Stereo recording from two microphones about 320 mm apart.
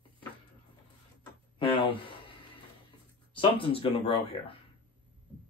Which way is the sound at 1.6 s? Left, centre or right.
Centre.